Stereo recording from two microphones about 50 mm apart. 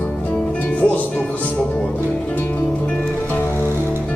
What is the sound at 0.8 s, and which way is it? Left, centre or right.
Music, left.